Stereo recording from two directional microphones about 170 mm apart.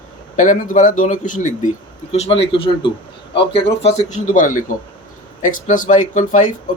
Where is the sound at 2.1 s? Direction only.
35° left (ahead or behind).